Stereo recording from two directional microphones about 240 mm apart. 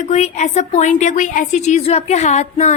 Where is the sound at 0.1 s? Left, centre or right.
Left.